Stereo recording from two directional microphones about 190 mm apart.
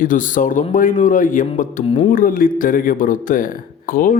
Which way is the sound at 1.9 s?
30° left (ahead or behind).